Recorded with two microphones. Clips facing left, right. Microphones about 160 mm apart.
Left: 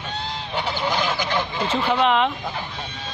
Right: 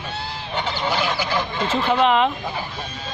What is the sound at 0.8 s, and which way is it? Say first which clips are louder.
Goose: right 1 dB; 10° right (ahead or behind).